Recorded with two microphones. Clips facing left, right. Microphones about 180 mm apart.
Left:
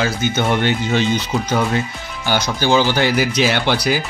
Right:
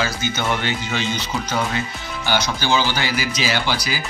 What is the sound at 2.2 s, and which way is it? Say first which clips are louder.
Speech: left 4 dB; 50° left (ahead or behind).